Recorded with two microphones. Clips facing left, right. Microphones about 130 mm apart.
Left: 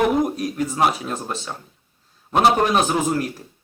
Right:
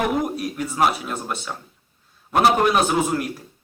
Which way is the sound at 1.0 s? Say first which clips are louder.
Left 1 dB; 35° left (ahead or behind).